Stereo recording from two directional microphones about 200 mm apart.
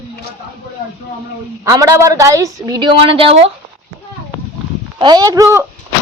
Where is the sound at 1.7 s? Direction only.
15° right (ahead or behind).